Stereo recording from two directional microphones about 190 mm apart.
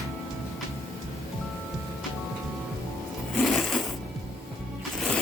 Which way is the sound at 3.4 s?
Centre (ahead or behind).